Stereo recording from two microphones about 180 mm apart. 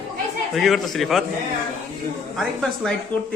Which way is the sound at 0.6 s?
Centre (ahead or behind).